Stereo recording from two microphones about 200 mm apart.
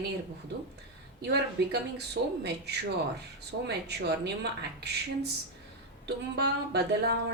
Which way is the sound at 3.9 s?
55° right (ahead or behind).